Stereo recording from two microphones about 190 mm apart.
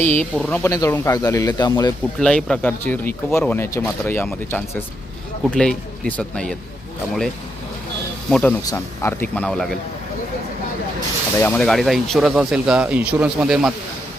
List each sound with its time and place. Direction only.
0.0 s speech: 10° left (ahead or behind)
2.1 s speech: 5° left (ahead or behind)
8.3 s speech: 5° left (ahead or behind)
11.3 s speech: 10° left (ahead or behind)